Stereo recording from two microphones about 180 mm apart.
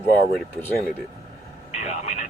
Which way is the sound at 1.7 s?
40° left (ahead or behind).